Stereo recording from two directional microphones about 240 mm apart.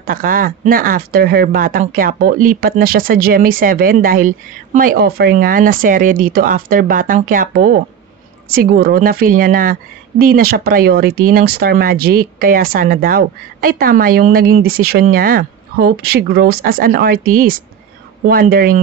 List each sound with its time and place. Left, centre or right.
0.0 s speech: right